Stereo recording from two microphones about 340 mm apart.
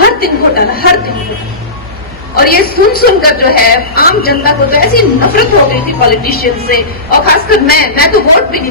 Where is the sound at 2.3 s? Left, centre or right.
Left.